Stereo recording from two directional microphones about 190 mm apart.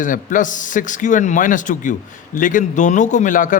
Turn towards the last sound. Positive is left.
turn(degrees=45)  # may be behind; listen again after turning